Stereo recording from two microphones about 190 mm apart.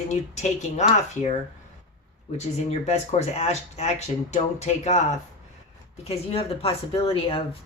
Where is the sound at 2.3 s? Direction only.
35° left (ahead or behind).